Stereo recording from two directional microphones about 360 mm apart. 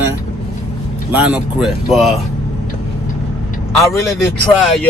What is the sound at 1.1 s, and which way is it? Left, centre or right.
Speech, centre.